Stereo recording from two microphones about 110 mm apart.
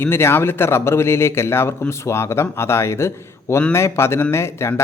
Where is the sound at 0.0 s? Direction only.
20° left (ahead or behind).